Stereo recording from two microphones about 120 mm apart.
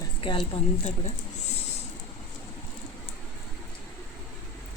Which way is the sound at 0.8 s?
70° left (ahead or behind).